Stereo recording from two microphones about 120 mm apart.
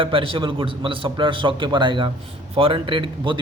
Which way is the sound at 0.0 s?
50° right (ahead or behind).